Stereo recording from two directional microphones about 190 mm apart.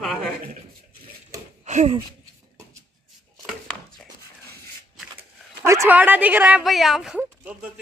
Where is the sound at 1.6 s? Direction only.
35° right (ahead or behind).